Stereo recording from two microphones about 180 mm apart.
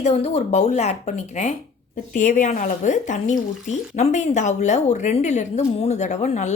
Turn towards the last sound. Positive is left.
turn(degrees=40)  # may be behind; listen again after turning